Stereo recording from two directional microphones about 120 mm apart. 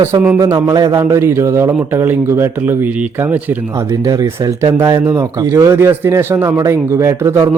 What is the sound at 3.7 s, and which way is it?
Speech, 25° right (ahead or behind).